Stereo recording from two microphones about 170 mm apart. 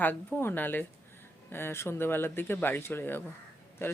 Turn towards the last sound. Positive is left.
turn(degrees=15)  # may be behind; listen again after turning